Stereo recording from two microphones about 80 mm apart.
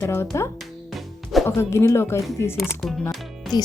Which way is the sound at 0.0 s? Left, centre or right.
Left.